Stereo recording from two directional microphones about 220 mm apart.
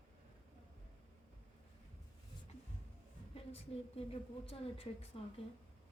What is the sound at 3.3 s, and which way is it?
A woman's voice, 25° left (ahead or behind).